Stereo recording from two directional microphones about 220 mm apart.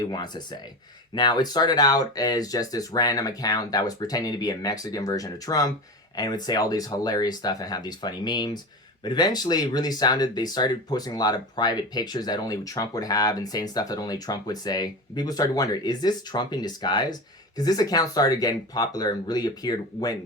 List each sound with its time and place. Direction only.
0.0 s speech: 20° left (ahead or behind)